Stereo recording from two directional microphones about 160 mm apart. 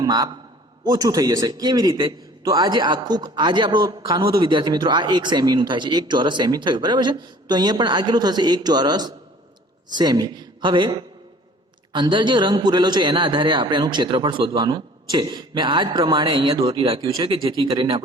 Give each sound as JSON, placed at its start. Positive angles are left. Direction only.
{"t": 0.0, "sound": "a man's voice", "side_deg": -25}